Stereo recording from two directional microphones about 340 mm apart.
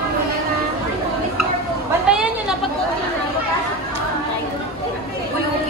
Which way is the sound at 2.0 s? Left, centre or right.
Centre.